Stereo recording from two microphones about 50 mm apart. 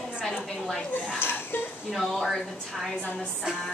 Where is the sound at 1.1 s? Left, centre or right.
Left.